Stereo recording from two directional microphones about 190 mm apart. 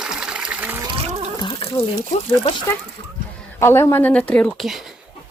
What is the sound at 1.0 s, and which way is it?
Water, 35° right (ahead or behind).